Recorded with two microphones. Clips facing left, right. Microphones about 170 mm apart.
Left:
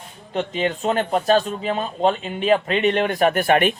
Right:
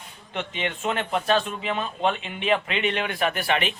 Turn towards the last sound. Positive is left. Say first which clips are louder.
# left 8 dB
turn(degrees=50)  # may be behind; listen again after turning